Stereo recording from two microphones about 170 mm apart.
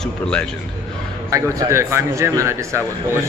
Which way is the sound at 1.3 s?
20° right (ahead or behind).